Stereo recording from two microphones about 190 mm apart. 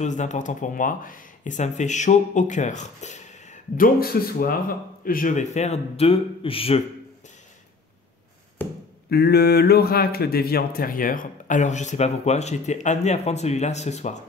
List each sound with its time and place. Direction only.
0.0 s speech: 40° left (ahead or behind)
9.1 s speech: 55° left (ahead or behind); by 14.2 s 35° left (ahead or behind)